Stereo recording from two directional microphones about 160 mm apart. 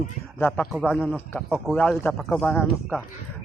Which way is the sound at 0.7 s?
Centre (ahead or behind).